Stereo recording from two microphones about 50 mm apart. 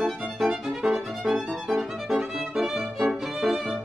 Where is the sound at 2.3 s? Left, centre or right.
Centre.